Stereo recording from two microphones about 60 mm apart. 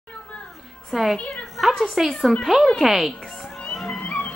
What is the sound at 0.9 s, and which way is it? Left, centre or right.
Speech, centre.